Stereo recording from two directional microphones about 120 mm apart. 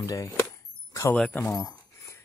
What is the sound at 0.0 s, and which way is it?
Speech, 25° left (ahead or behind).